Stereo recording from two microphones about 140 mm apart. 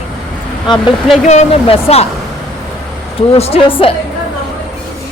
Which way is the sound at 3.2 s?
45° left (ahead or behind).